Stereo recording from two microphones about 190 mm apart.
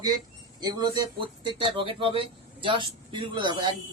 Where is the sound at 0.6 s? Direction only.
20° right (ahead or behind).